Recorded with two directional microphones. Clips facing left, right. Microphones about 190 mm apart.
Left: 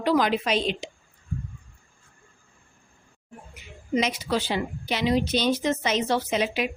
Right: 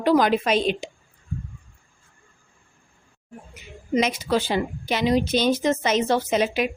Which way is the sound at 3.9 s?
50° right (ahead or behind).